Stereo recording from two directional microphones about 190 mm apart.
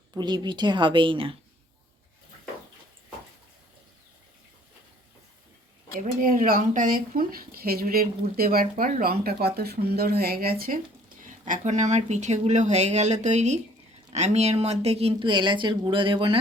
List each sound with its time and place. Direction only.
0.1 s a woman's voice: 20° right (ahead or behind)
6.2 s a woman's voice: 50° right (ahead or behind); by 16.4 s 25° right (ahead or behind)